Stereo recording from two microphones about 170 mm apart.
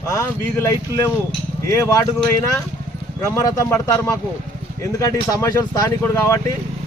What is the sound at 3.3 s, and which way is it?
Speech, 20° left (ahead or behind).